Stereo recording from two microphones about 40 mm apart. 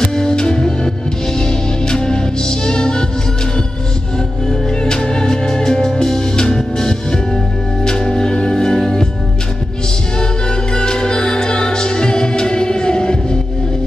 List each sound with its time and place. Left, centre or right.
0.0 s music: centre
4.8 s music: centre
10.7 s music: centre